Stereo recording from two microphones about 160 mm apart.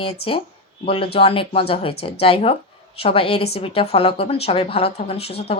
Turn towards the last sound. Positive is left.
turn(degrees=40)  # may be behind; listen again after turning